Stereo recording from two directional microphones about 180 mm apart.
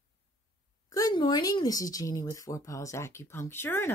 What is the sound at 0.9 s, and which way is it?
Speech, 20° left (ahead or behind).